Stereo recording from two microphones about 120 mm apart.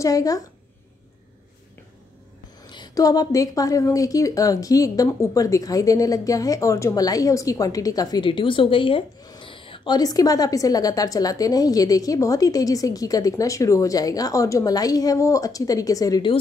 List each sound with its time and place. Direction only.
0.0 s a woman's voice: 30° left (ahead or behind)
2.6 s a woman's voice: 40° left (ahead or behind)
8.3 s a woman's voice: 45° left (ahead or behind)
9.2 s a sound: 30° left (ahead or behind)
9.5 s a woman's voice: 45° left (ahead or behind); by 16.3 s 30° left (ahead or behind)